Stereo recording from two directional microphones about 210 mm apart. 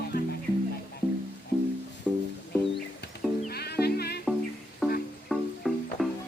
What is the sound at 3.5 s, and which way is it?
Music, 50° left (ahead or behind).